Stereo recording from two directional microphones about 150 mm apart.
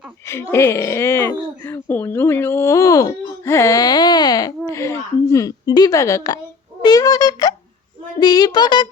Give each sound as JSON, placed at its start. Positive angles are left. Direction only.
{"t": 0.5, "sound": "speech", "side_deg": 20}